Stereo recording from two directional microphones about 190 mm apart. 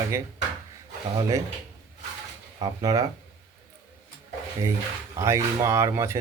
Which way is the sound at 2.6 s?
20° right (ahead or behind).